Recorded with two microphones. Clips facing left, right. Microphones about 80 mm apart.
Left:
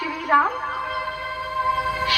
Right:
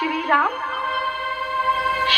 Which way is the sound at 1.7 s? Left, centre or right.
Right.